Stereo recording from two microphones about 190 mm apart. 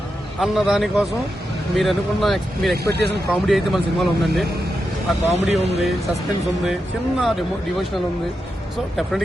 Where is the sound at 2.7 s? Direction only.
60° right (ahead or behind).